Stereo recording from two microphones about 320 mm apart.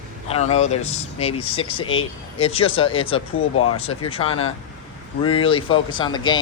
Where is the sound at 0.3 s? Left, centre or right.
Centre.